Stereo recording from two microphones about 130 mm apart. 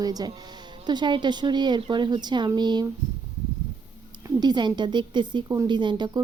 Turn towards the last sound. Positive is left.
turn(degrees=-35)  # may be behind; listen again after turning